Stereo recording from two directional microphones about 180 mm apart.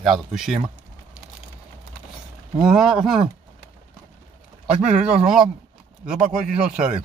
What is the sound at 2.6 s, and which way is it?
Speech, 5° right (ahead or behind).